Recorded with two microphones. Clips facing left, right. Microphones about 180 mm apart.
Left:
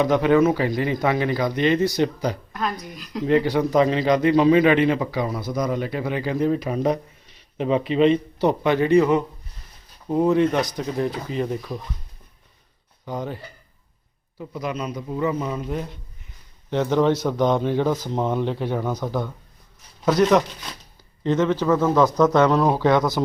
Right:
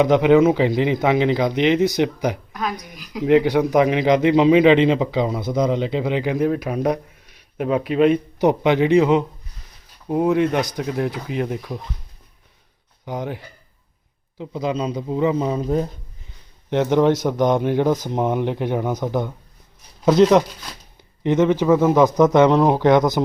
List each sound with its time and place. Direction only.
0.0 s speech: 15° right (ahead or behind)
2.5 s a sound: centre (ahead or behind)
2.9 s speech: centre (ahead or behind)
3.2 s speech: 15° right (ahead or behind)
8.4 s speech: 15° right (ahead or behind)
13.1 s speech: 15° right (ahead or behind)
14.3 s speech: 25° right (ahead or behind)
16.6 s speech: 20° right (ahead or behind)